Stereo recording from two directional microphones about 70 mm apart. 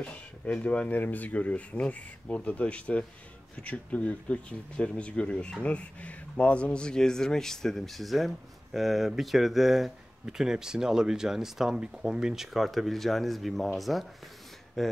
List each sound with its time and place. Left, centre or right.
0.0 s speech: centre